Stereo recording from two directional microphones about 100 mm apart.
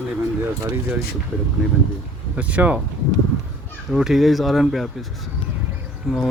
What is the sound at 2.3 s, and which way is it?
Speech, 15° right (ahead or behind).